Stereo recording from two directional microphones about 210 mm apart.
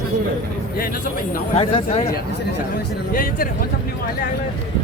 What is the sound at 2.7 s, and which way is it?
Speech, 45° left (ahead or behind).